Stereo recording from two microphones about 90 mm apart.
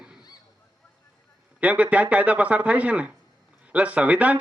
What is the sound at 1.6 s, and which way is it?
A man's voice, 15° right (ahead or behind).